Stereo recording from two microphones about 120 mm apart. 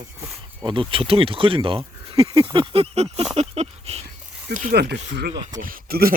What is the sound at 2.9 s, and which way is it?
Speech, 65° right (ahead or behind).